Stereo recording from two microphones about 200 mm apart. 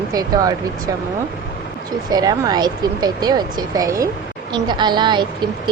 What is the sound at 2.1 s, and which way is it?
Speech, 20° right (ahead or behind).